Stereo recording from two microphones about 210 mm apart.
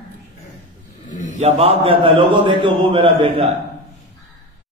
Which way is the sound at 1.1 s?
35° left (ahead or behind).